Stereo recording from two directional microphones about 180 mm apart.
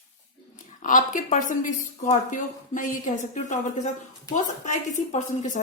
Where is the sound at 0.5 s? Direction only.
45° left (ahead or behind).